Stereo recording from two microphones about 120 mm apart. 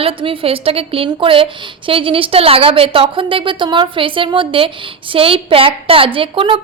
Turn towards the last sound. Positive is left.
turn(degrees=-50)  # may be behind; listen again after turning